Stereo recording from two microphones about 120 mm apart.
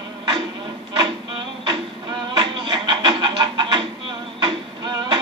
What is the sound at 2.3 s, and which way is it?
Music, 40° right (ahead or behind).